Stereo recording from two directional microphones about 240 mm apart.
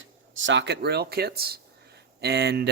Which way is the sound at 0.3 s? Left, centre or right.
Right.